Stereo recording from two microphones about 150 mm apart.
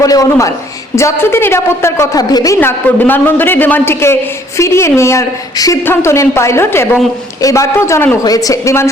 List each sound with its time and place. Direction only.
0.0 s a woman's voice: 20° left (ahead or behind)
2.6 s a woman's voice: 15° left (ahead or behind)